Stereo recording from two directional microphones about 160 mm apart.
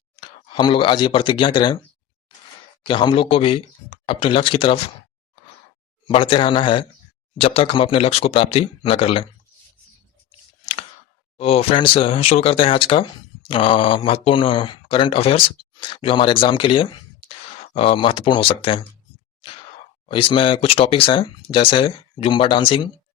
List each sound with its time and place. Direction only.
0.2 s speech: 30° left (ahead or behind)
2.8 s speech: 30° left (ahead or behind)
6.1 s speech: 35° left (ahead or behind)
11.3 s speech: 35° left (ahead or behind)
20.1 s speech: 35° left (ahead or behind)